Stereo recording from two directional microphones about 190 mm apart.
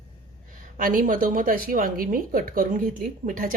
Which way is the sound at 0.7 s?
45° right (ahead or behind).